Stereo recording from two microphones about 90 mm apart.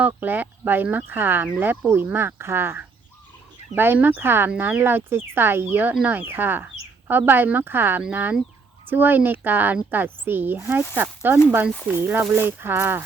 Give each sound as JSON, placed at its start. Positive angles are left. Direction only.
{"t": 0.0, "sound": "speech", "side_deg": -20}